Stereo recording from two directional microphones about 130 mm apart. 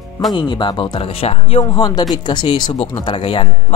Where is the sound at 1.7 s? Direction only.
30° left (ahead or behind).